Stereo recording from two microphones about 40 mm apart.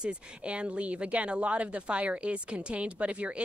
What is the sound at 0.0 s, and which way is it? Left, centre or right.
Speech, right.